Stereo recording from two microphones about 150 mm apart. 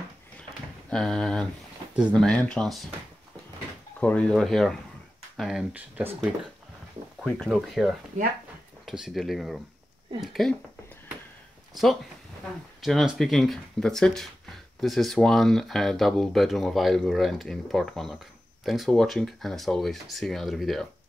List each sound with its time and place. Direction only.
0.4 s a sound: 5° left (ahead or behind)
2.0 s speech: 5° left (ahead or behind)
4.0 s speech: 10° left (ahead or behind); by 6.1 s 10° right (ahead or behind)
7.2 s speech: 5° left (ahead or behind)
11.7 s speech: centre (ahead or behind)